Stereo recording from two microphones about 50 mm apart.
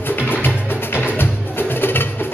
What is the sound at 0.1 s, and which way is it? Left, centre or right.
Music, left.